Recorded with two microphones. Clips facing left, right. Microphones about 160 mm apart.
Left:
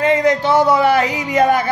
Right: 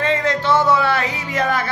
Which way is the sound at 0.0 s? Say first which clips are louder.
Left 5 dB; 15° left (ahead or behind).